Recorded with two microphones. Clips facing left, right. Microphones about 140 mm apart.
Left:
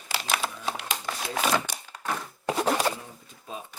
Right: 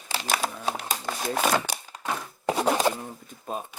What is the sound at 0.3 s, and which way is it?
Crumpling, 40° right (ahead or behind).